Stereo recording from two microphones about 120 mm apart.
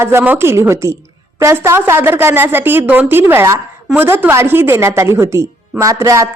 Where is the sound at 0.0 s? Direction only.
20° right (ahead or behind).